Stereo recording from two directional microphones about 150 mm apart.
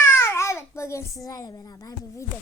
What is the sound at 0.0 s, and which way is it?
A child's voice, 15° left (ahead or behind).